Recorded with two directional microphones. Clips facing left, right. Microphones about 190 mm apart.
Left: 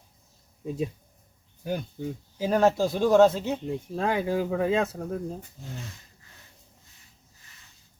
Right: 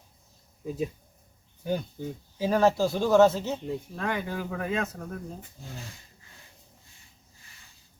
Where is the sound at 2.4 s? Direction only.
15° left (ahead or behind).